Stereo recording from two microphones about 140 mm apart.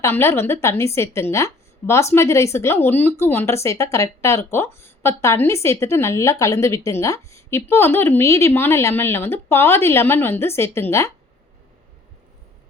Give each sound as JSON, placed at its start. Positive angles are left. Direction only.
{"t": 0.0, "sound": "a woman's voice", "side_deg": 15}